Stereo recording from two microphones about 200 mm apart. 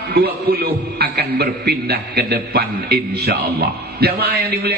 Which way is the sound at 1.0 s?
50° right (ahead or behind).